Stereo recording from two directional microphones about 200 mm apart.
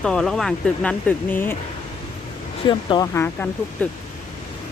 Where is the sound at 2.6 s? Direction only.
20° left (ahead or behind).